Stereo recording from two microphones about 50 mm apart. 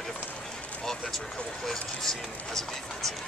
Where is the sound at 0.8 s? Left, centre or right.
Centre.